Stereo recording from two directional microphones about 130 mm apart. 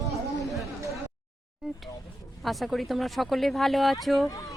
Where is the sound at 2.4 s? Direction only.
Centre (ahead or behind).